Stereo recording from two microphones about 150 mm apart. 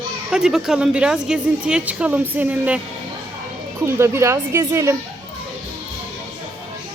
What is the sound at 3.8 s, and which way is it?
Speech, 20° right (ahead or behind).